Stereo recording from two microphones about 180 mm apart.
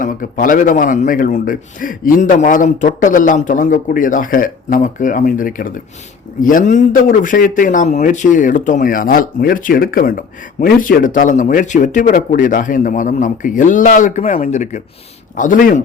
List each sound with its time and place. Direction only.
0.0 s a man's voice: 45° left (ahead or behind)